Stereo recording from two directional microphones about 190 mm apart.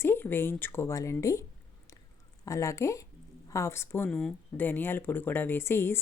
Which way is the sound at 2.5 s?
15° left (ahead or behind).